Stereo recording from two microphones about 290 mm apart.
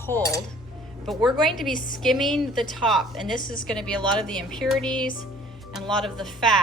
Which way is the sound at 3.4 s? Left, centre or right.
Left.